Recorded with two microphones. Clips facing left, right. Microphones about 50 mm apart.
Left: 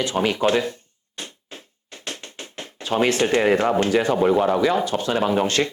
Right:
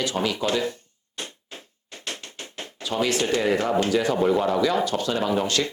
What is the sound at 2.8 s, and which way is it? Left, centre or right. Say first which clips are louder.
Speech: left 4 dB; left.